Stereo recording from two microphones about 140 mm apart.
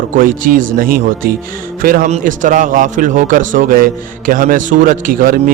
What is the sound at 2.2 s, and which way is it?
A man's voice, 65° right (ahead or behind).